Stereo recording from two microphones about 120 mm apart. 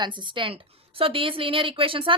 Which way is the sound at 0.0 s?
40° right (ahead or behind).